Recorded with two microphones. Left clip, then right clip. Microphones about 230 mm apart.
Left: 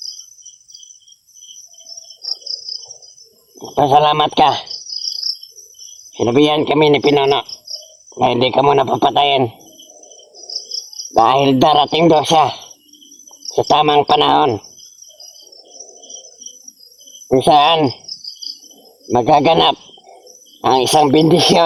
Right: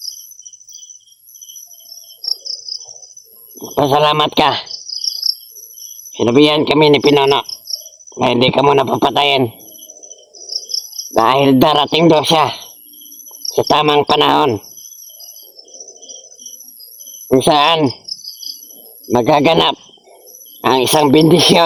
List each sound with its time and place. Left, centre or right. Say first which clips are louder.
3.6 s speech: left 1 dB; right
6.1 s speech: right 2 dB; right
10.7 s speech: right 3 dB; right
17.2 s cricket: even; right
19.0 s speech: even; right